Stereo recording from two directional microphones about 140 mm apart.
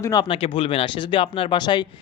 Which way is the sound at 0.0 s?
30° left (ahead or behind).